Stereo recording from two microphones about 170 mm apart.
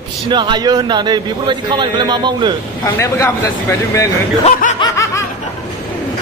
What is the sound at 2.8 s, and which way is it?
Speech, 15° left (ahead or behind).